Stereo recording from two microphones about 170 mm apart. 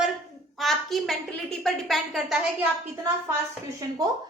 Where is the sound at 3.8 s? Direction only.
20° right (ahead or behind).